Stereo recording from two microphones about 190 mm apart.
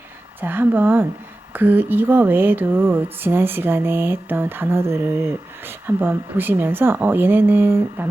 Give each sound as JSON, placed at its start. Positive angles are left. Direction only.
{"t": 0.4, "sound": "speech", "side_deg": -10}